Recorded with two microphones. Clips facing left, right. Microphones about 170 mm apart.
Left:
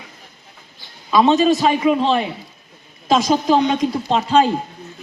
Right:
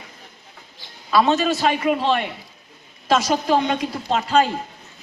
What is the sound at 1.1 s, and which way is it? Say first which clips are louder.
Speech: left 4 dB; 15° left (ahead or behind).